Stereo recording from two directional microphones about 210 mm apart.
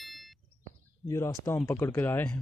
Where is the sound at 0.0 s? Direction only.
Centre (ahead or behind).